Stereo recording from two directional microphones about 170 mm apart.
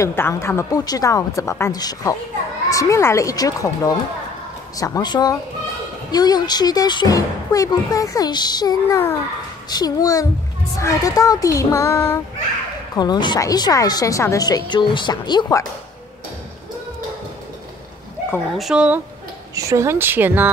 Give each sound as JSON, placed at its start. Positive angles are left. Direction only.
{"t": 0.0, "sound": "speech", "side_deg": 15}
{"t": 18.5, "sound": "speech", "side_deg": 0}
{"t": 19.5, "sound": "speech", "side_deg": -20}